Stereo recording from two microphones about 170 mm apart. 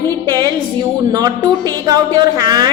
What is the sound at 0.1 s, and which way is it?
A woman's voice, 25° right (ahead or behind).